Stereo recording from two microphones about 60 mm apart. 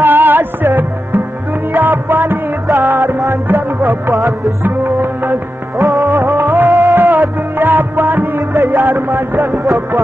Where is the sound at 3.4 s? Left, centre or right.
Right.